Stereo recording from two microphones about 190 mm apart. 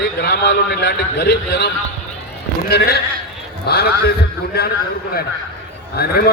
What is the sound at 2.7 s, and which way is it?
A man's voice, 55° left (ahead or behind).